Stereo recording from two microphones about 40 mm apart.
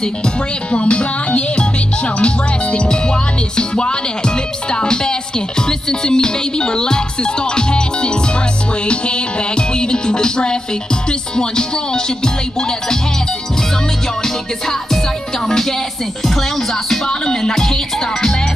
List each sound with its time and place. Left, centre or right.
0.0 s music: left
14.2 s music: centre
17.1 s music: centre